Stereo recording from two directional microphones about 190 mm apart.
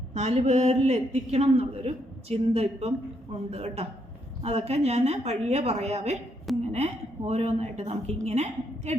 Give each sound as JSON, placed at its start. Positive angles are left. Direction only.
{"t": 0.1, "sound": "a man's voice", "side_deg": -35}